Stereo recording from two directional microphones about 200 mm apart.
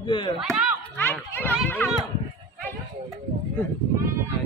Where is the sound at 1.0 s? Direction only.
10° left (ahead or behind).